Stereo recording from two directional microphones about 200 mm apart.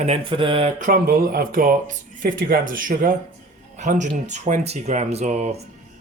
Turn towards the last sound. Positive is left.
turn(degrees=-35)  # may be behind; listen again after turning